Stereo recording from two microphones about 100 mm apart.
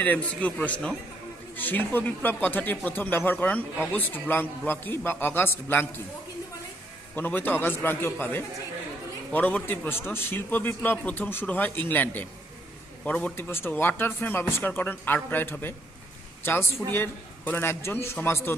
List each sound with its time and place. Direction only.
0.0 s a man's voice: 15° left (ahead or behind)
7.2 s a man's voice: 20° left (ahead or behind)